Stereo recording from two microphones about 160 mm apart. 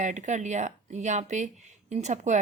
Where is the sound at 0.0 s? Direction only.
50° right (ahead or behind).